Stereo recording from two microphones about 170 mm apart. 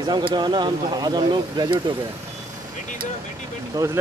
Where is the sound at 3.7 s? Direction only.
20° right (ahead or behind).